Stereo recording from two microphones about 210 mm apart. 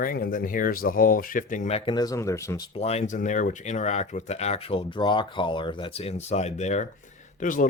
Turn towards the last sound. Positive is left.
turn(degrees=40)  # may be behind; listen again after turning